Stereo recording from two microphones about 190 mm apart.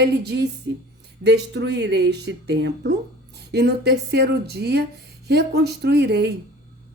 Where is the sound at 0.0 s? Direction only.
60° right (ahead or behind).